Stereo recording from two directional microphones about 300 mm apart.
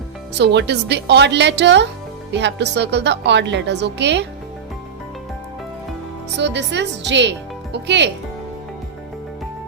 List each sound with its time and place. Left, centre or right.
0.3 s a woman's voice: right
6.4 s a woman's voice: right